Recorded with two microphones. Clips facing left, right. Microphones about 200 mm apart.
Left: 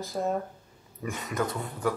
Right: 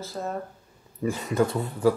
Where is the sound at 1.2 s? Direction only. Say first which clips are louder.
Right 6 dB; 30° right (ahead or behind).